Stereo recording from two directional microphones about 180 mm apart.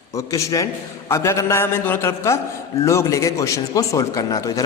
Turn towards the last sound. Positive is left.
turn(degrees=20)  # may be behind; listen again after turning